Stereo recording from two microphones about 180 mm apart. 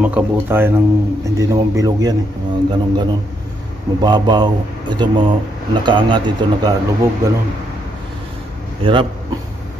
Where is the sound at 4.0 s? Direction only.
25° right (ahead or behind).